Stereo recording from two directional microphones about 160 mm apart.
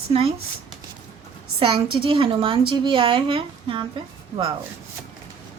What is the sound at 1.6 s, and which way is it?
Speech, 35° right (ahead or behind).